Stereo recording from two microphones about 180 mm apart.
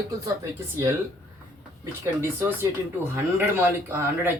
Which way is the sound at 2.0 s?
15° right (ahead or behind).